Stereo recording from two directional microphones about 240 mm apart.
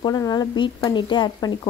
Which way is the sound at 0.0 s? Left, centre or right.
Centre.